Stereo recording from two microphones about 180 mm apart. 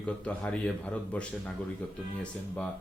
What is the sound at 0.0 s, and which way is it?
Speech, 5° left (ahead or behind).